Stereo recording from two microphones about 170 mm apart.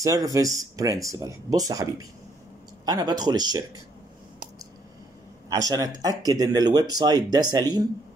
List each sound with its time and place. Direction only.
0.0 s speech: 20° right (ahead or behind)
5.5 s speech: 20° right (ahead or behind)